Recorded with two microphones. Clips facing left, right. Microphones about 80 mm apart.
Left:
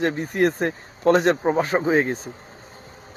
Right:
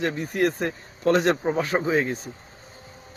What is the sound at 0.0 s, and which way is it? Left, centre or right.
A man's voice, left.